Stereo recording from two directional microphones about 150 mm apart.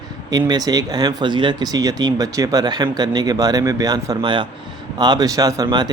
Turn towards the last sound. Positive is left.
turn(degrees=-30)  # may be behind; listen again after turning